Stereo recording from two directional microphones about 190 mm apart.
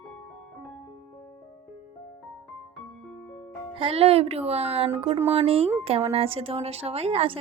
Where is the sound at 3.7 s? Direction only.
30° right (ahead or behind).